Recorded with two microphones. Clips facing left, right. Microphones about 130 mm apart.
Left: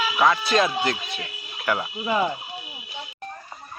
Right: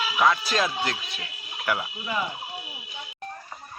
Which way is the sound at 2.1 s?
45° left (ahead or behind).